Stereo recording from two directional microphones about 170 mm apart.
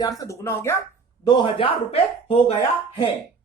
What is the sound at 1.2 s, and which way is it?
Speech, 25° left (ahead or behind).